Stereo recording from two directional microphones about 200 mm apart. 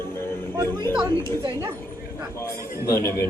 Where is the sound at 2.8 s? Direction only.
15° left (ahead or behind).